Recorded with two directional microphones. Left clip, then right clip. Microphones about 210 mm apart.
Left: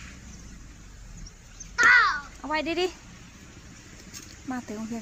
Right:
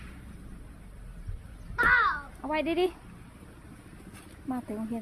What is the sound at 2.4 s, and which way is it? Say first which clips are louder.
Speech: even; 5° left (ahead or behind).